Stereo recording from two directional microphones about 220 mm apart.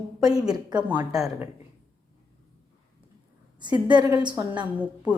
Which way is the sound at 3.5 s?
20° right (ahead or behind).